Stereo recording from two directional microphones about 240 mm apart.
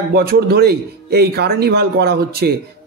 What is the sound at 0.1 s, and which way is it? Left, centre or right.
A man's voice, right.